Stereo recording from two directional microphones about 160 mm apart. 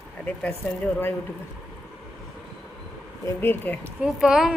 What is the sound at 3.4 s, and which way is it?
Speech, 10° left (ahead or behind).